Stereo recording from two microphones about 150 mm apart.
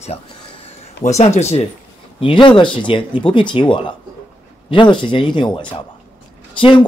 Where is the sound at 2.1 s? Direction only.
35° left (ahead or behind).